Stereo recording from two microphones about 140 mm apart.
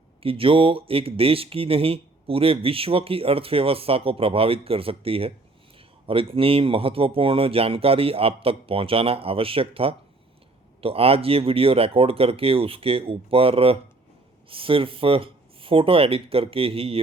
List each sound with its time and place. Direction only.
0.2 s speech: 40° right (ahead or behind)